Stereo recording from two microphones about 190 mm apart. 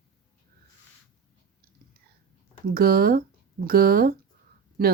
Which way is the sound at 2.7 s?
55° right (ahead or behind).